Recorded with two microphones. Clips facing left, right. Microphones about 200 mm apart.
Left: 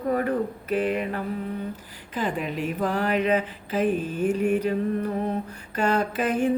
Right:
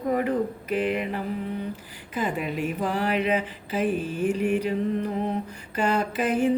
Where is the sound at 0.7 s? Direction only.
45° left (ahead or behind).